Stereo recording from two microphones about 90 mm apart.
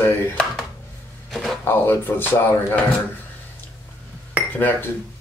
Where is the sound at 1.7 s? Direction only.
25° left (ahead or behind).